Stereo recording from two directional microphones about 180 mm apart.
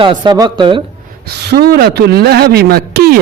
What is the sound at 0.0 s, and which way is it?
Speech, 25° right (ahead or behind).